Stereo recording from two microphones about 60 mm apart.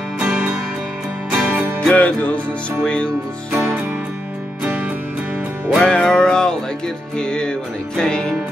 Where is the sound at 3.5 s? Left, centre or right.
Right.